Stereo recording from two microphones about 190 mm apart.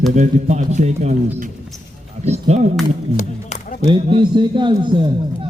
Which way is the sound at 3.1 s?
40° left (ahead or behind).